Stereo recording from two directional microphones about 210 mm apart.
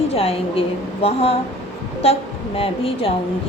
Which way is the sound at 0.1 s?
25° left (ahead or behind).